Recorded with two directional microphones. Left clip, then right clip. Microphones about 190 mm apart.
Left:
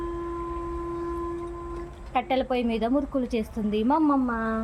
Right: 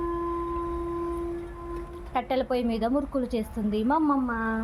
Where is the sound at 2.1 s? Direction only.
Centre (ahead or behind).